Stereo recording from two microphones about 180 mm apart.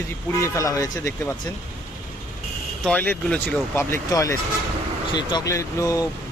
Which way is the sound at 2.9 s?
10° left (ahead or behind).